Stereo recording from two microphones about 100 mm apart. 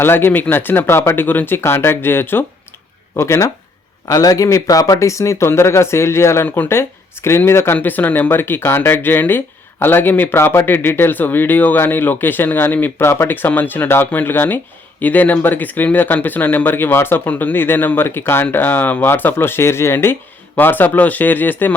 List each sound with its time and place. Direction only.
0.0 s speech: 20° left (ahead or behind)
4.0 s speech: 40° left (ahead or behind); by 21.7 s 20° left (ahead or behind)